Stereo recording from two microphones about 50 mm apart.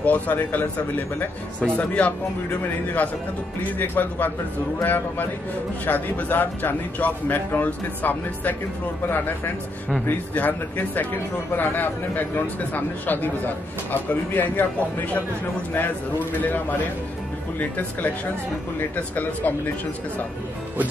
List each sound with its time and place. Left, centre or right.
0.0 s speech: left
3.7 s speech: left
15.7 s speech: left